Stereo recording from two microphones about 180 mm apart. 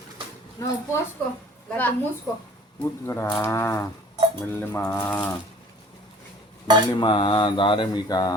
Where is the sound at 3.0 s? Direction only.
15° left (ahead or behind).